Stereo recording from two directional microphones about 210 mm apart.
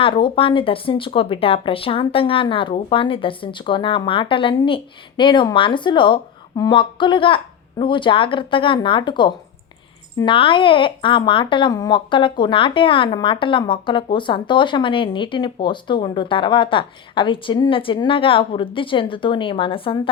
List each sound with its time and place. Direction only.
0.0 s speech: 25° left (ahead or behind)